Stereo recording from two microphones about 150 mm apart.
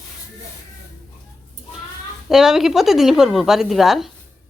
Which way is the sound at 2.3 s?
5° right (ahead or behind).